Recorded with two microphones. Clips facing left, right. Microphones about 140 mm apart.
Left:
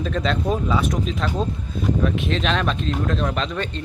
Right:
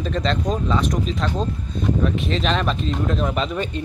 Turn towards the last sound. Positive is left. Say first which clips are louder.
# right 2 dB
turn(degrees=-10)  # may be behind; listen again after turning